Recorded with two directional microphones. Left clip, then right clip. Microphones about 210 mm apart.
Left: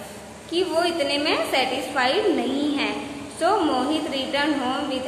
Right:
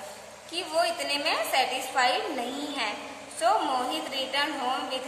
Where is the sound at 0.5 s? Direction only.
20° right (ahead or behind).